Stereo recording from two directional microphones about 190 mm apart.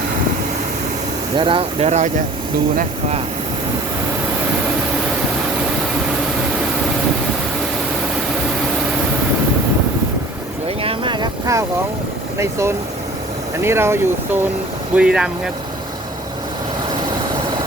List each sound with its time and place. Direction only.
1.4 s speech: 30° right (ahead or behind)
10.8 s vehicle: 25° right (ahead or behind)
12.4 s speech: 15° right (ahead or behind)